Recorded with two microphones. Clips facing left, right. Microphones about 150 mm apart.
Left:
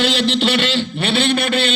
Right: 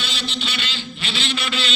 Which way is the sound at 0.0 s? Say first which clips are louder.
Left 13 dB; 90° left.